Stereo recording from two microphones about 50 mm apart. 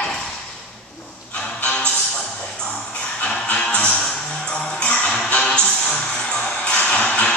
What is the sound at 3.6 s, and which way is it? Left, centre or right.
Music, centre.